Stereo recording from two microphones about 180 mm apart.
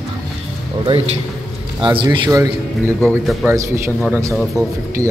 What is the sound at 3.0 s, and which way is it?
Speech, 10° left (ahead or behind).